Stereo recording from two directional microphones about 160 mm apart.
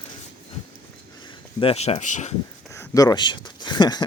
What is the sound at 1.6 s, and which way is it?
Speech, 40° left (ahead or behind).